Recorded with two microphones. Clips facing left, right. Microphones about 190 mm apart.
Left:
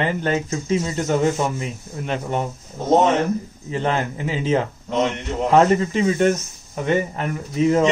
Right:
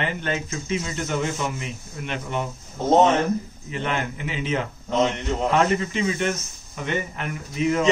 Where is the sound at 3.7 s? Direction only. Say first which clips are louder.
Left 5 dB; 40° left (ahead or behind).